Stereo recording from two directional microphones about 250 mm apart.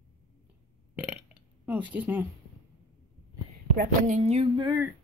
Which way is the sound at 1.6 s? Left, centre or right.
Centre.